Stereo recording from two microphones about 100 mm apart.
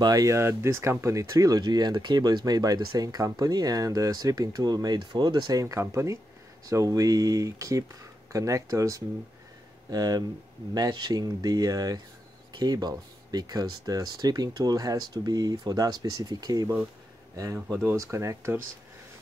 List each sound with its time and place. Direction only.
0.0 s speech: 35° right (ahead or behind)
17.8 s speech: 30° right (ahead or behind)